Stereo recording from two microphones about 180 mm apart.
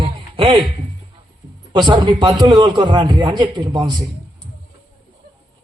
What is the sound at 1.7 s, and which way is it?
A man's voice, 25° right (ahead or behind).